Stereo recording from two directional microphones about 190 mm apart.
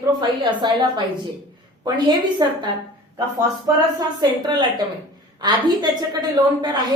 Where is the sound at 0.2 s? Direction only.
25° right (ahead or behind).